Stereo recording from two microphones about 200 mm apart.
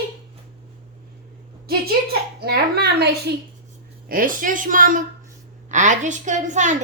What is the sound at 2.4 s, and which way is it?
Speech, 55° right (ahead or behind).